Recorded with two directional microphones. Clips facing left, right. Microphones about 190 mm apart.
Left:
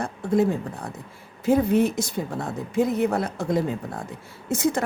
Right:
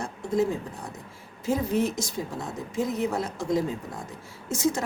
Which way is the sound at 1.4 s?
60° left (ahead or behind).